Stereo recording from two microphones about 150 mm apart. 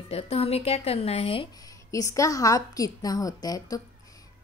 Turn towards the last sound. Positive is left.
turn(degrees=25)  # may be behind; listen again after turning